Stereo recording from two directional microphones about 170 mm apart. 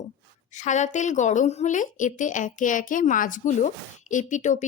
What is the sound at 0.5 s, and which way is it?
A woman's voice, 45° left (ahead or behind).